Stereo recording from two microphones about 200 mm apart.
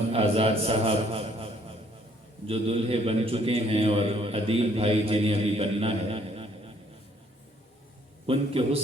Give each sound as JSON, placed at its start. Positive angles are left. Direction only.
{"t": 0.1, "sound": "a man's voice", "side_deg": -30}
{"t": 8.3, "sound": "a man's voice", "side_deg": -30}